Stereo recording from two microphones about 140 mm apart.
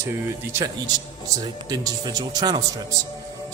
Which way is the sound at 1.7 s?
30° right (ahead or behind).